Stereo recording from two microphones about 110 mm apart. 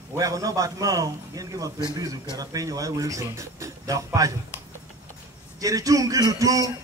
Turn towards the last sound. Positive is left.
turn(degrees=-30)  # may be behind; listen again after turning